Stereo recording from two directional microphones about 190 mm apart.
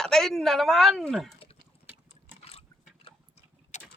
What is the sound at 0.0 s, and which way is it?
Speech, centre (ahead or behind).